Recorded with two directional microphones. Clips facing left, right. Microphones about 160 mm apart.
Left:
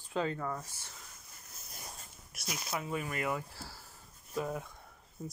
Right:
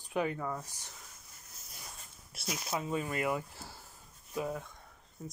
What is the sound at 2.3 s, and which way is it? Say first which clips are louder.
Speech: right 2 dB; 25° right (ahead or behind).